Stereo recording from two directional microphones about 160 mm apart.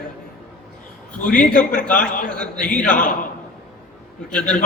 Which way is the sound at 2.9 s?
55° left (ahead or behind).